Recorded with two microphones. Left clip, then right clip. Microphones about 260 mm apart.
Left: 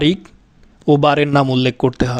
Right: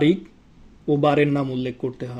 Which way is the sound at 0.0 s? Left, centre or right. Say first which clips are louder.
Left 3 dB; left.